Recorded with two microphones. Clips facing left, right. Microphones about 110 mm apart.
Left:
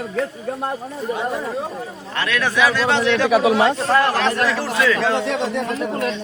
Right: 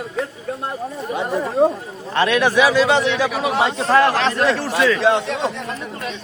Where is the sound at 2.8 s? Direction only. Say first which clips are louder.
Right 1 dB; 5° right (ahead or behind).